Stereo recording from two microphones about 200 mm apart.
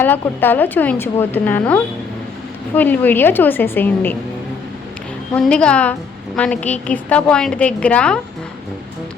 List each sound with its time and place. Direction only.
0.0 s a woman's voice: 10° left (ahead or behind)
5.3 s a woman's voice: 5° left (ahead or behind)